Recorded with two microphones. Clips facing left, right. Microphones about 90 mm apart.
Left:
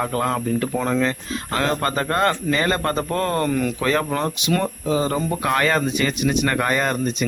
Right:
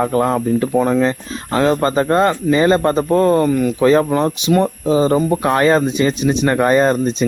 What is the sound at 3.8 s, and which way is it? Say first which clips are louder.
Speech: right 8 dB; 20° right (ahead or behind).